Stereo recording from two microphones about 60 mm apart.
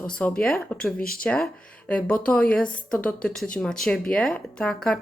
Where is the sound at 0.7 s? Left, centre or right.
Centre.